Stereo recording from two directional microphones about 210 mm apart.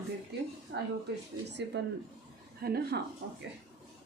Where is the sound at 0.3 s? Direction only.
50° right (ahead or behind).